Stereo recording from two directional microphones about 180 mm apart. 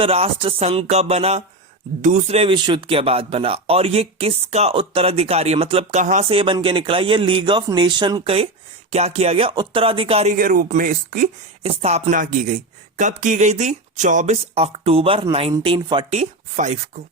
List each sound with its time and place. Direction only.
0.0 s speech: 30° right (ahead or behind)
10.3 s speech: 50° right (ahead or behind)
11.6 s speech: 35° right (ahead or behind)
16.1 s speech: 45° right (ahead or behind)